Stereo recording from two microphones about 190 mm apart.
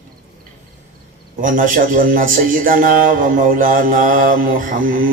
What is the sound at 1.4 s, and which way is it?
Speech, 45° right (ahead or behind).